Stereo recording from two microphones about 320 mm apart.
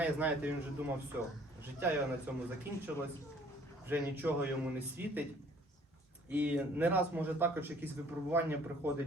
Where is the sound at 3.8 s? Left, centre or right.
Centre.